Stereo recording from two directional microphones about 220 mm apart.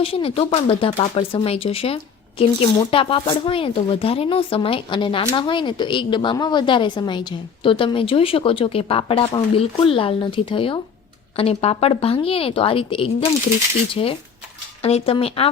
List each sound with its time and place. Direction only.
0.0 s speech: 25° left (ahead or behind)